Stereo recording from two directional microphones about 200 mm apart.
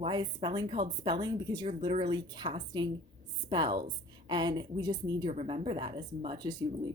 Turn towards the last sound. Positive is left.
turn(degrees=-20)  # may be behind; listen again after turning